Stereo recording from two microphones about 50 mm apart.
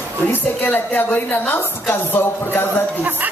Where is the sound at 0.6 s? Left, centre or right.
Left.